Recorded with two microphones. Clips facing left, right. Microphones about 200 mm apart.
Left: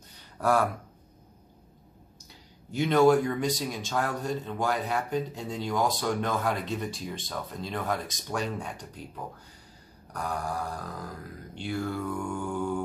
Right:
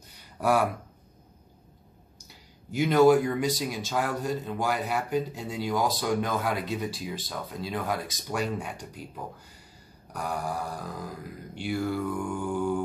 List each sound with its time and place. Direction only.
0.4 s speech: 10° right (ahead or behind)
2.7 s speech: 5° right (ahead or behind)